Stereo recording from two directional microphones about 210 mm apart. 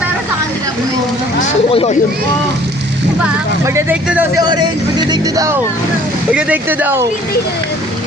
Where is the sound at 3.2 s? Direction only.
10° right (ahead or behind).